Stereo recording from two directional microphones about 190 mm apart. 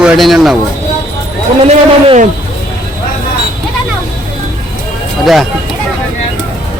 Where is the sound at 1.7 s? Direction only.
35° right (ahead or behind).